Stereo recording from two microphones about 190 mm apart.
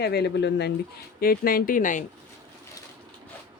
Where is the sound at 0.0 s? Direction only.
60° left (ahead or behind).